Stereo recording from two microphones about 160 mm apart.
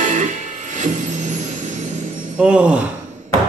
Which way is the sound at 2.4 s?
5° right (ahead or behind).